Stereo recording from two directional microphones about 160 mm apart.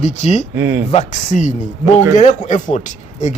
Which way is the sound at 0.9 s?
45° left (ahead or behind).